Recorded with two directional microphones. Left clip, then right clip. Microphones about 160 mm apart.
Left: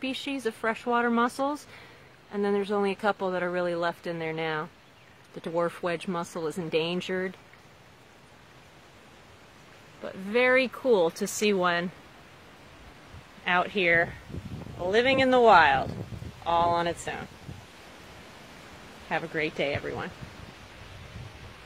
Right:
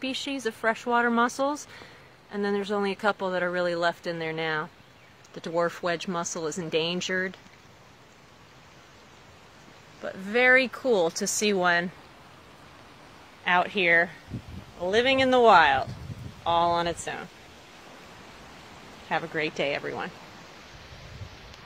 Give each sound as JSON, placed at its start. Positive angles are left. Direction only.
{"t": 0.0, "sound": "speech", "side_deg": 10}
{"t": 10.0, "sound": "speech", "side_deg": 15}
{"t": 13.4, "sound": "speech", "side_deg": 25}
{"t": 19.0, "sound": "speech", "side_deg": 20}